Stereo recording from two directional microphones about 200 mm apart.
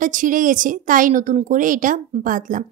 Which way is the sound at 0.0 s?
40° right (ahead or behind).